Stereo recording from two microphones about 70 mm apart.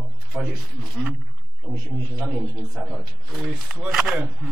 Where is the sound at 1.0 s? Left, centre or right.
Centre.